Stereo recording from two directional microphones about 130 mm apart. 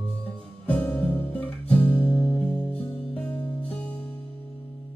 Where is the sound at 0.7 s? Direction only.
10° left (ahead or behind).